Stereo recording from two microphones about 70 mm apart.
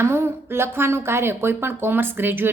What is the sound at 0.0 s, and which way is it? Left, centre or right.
A woman's voice, right.